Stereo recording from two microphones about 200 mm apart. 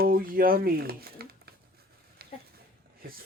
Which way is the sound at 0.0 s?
45° right (ahead or behind).